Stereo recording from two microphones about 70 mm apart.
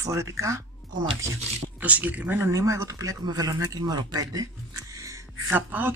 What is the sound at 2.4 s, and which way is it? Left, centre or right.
Speech, right.